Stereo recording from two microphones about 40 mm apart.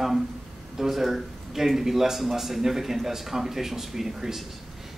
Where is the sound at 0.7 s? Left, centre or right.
Centre.